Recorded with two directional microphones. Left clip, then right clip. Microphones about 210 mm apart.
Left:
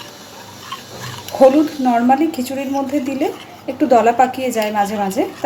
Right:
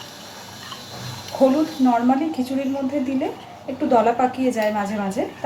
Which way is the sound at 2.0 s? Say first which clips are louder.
Left 6 dB; 50° left (ahead or behind).